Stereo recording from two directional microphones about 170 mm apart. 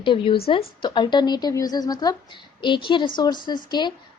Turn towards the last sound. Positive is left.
turn(degrees=25)  # may be behind; listen again after turning